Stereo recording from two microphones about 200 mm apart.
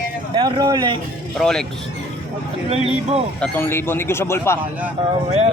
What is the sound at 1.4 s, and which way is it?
Speech, centre (ahead or behind).